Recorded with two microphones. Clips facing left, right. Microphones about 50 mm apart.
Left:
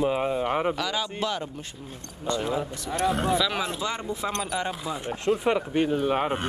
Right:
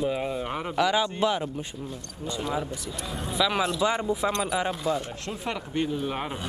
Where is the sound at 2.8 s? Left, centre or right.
Left.